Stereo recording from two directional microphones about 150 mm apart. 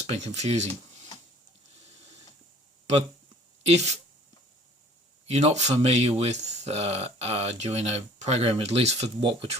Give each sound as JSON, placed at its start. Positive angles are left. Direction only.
{"t": 0.0, "sound": "speech", "side_deg": -50}
{"t": 3.7, "sound": "speech", "side_deg": -45}
{"t": 5.3, "sound": "speech", "side_deg": -45}